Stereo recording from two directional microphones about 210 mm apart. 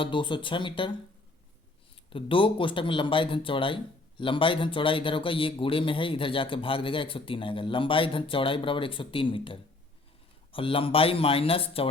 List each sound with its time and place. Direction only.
0.0 s speech: 25° left (ahead or behind)
2.0 s speech: 25° left (ahead or behind)